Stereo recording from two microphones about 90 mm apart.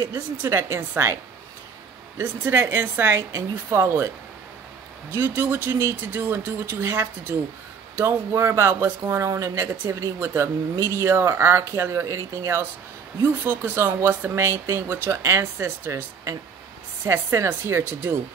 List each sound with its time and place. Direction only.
0.1 s speech: 30° right (ahead or behind)
2.1 s speech: 30° right (ahead or behind)
5.1 s speech: 25° right (ahead or behind)